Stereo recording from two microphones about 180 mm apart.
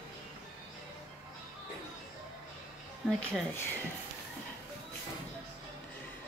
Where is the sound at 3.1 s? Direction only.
5° left (ahead or behind).